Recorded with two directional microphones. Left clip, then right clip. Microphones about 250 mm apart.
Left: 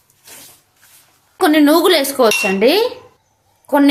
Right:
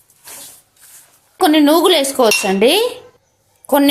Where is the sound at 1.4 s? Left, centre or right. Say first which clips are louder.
Even; centre.